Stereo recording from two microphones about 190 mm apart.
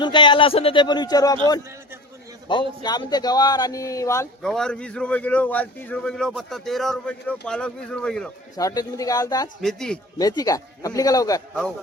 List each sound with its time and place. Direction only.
0.0 s speech: 25° left (ahead or behind)
2.5 s speech: 25° left (ahead or behind)
4.4 s a man's voice: 5° left (ahead or behind)
8.5 s speech: 20° left (ahead or behind)
9.6 s a man's voice: centre (ahead or behind)
10.2 s speech: 20° left (ahead or behind)